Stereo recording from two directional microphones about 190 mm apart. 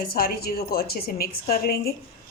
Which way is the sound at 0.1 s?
55° left (ahead or behind).